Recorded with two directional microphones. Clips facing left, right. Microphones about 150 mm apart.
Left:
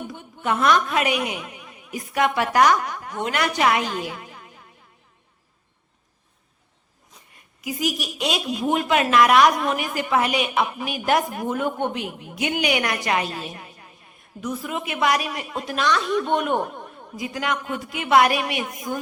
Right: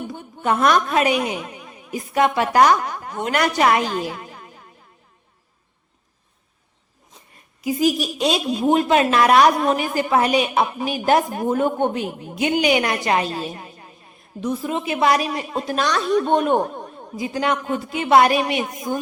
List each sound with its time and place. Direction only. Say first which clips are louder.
0.1 s a woman's voice: right 4 dB; 40° right (ahead or behind)
3.2 s a woman's voice: right 3 dB; 45° right (ahead or behind)
7.6 s a woman's voice: right 7 dB; 30° right (ahead or behind)